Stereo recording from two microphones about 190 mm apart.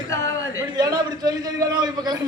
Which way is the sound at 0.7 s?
20° right (ahead or behind).